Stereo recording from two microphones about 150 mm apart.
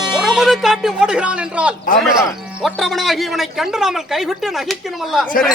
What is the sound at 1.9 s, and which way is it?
Speech, centre (ahead or behind).